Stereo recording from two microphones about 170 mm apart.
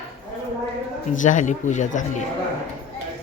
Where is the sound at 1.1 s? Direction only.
50° left (ahead or behind).